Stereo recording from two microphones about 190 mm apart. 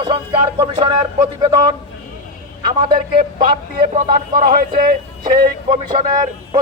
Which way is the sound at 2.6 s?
25° right (ahead or behind).